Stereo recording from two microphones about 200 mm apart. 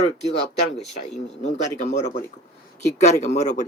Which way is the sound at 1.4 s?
35° left (ahead or behind).